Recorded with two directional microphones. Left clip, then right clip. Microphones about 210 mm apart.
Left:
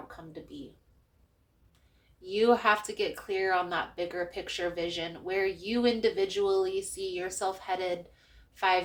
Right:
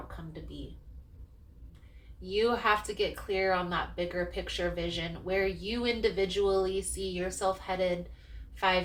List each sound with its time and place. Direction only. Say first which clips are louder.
2.3 s a woman's voice: left 3 dB; 50° left (ahead or behind)